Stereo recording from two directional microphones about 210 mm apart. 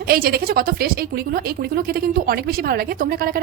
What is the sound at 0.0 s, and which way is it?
Speech, 45° right (ahead or behind).